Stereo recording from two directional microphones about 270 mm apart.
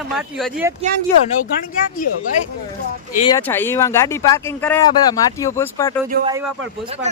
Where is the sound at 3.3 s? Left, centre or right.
Centre.